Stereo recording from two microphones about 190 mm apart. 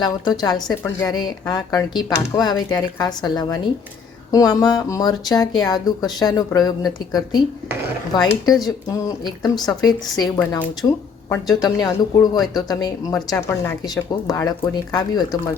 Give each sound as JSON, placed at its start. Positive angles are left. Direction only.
{"t": 0.0, "sound": "speech", "side_deg": 20}